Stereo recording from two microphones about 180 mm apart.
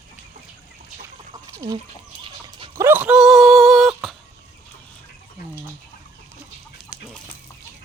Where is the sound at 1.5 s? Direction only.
20° right (ahead or behind).